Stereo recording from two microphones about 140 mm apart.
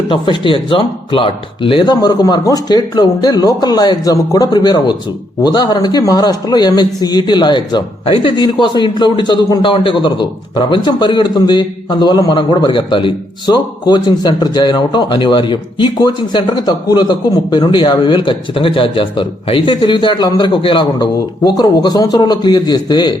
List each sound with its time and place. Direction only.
0.1 s a man's voice: 35° left (ahead or behind)